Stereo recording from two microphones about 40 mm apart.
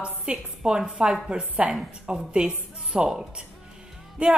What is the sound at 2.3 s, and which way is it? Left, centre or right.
Speech, right.